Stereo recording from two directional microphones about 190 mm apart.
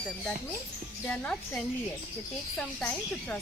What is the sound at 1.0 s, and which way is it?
A woman's voice, 5° left (ahead or behind).